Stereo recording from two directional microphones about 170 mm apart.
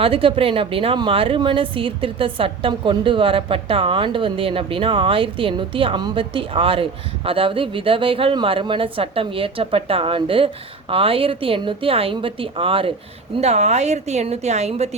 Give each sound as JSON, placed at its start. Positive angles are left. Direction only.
{"t": 0.0, "sound": "speech", "side_deg": -30}